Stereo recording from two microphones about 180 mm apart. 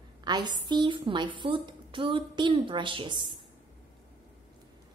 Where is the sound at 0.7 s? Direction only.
25° right (ahead or behind).